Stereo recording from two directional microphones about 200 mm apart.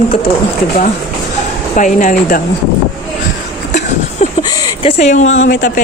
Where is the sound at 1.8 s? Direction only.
40° left (ahead or behind).